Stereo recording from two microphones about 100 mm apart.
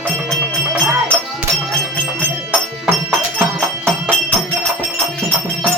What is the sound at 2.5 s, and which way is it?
Music, 15° right (ahead or behind).